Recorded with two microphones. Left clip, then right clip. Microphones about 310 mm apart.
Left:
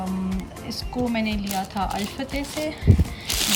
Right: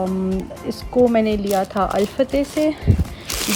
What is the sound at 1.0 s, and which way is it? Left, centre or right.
Speech, left.